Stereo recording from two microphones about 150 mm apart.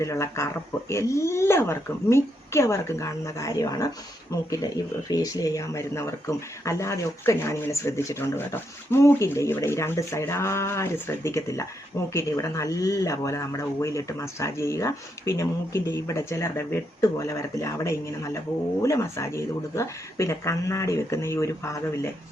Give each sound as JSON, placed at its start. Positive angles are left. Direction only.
{"t": 0.0, "sound": "speech", "side_deg": 20}